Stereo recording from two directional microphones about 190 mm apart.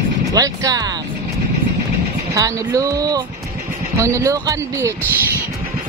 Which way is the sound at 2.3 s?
20° right (ahead or behind).